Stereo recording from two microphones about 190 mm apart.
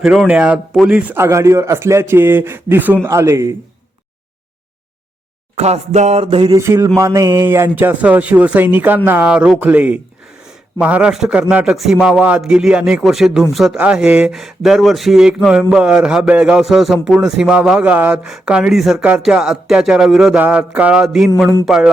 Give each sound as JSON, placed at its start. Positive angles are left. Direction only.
{"t": 0.0, "sound": "a man's voice", "side_deg": -5}
{"t": 5.5, "sound": "a sound", "side_deg": -35}
{"t": 6.6, "sound": "a man's voice", "side_deg": -15}